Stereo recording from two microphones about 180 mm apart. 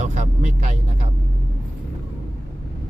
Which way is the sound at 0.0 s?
40° right (ahead or behind).